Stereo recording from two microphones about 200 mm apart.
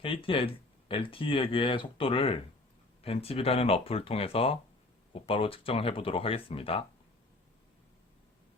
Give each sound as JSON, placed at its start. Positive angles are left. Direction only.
{"t": 0.0, "sound": "speech", "side_deg": 25}